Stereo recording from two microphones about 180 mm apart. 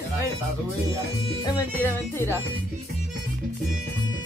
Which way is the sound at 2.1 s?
15° left (ahead or behind).